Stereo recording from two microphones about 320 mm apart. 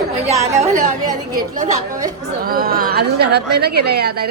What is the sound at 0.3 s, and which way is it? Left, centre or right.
A woman's voice, right.